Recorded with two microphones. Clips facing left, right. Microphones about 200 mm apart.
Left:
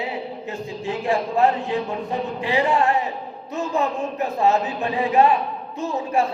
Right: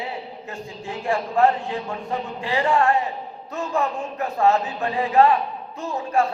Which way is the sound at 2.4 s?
20° left (ahead or behind).